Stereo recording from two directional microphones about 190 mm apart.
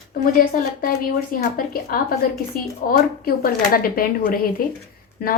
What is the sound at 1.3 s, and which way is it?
Speech, 50° left (ahead or behind).